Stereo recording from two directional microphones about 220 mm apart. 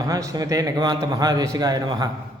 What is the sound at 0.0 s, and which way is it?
A man's voice, 15° right (ahead or behind).